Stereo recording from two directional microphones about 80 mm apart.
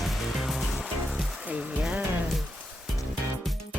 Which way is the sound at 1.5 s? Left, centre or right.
Centre.